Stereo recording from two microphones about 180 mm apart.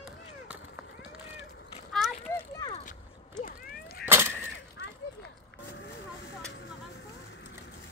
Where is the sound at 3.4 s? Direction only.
55° left (ahead or behind).